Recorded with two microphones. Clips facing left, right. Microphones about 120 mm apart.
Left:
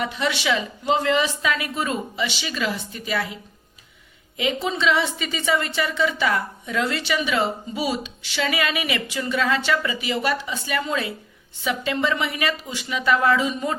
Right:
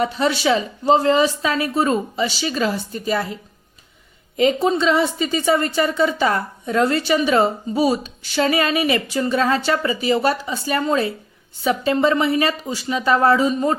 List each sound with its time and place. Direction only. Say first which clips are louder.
0.0 s a woman's voice: right 6 dB; 35° right (ahead or behind)
4.4 s a woman's voice: right 7 dB; 40° right (ahead or behind)